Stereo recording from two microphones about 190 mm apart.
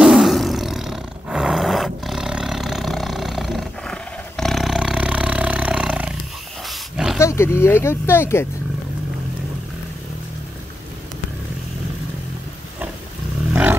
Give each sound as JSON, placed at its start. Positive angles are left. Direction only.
{"t": 0.0, "sound": "roar", "side_deg": 0}
{"t": 7.2, "sound": "speech", "side_deg": 15}
{"t": 13.5, "sound": "roaring cats", "side_deg": -10}